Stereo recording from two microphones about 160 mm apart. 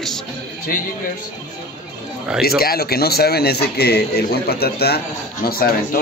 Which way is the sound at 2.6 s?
75° left (ahead or behind).